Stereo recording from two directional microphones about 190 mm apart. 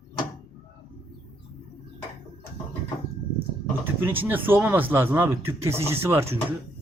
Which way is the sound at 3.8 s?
10° right (ahead or behind).